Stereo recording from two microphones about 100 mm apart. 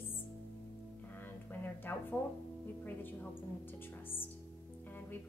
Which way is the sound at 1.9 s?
25° left (ahead or behind).